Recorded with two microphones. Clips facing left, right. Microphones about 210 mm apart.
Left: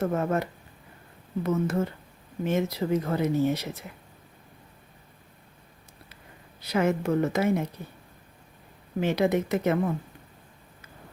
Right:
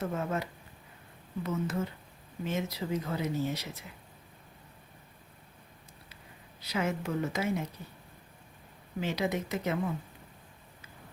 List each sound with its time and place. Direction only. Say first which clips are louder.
0.0 s speech: left 7 dB; 55° left (ahead or behind)
1.5 s speech: left 7 dB; 55° left (ahead or behind)
6.7 s speech: left 8 dB; 60° left (ahead or behind)
9.0 s speech: left 8 dB; 60° left (ahead or behind)